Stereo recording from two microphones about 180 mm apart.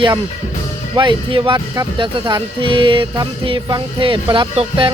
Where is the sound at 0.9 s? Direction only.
25° right (ahead or behind).